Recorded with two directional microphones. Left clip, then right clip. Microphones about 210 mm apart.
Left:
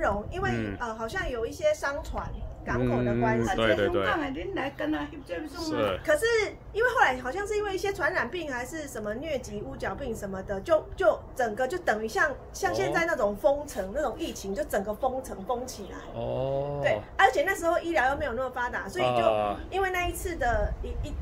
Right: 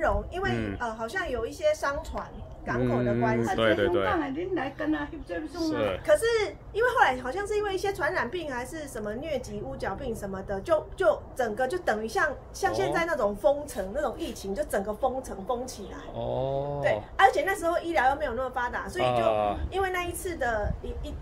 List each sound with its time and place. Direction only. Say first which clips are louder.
0.0 s speech: right 1 dB; centre (ahead or behind)
4.2 s a woman's voice: right 1 dB; 45° left (ahead or behind)
5.7 s a woman's voice: right 1 dB; 5° left (ahead or behind)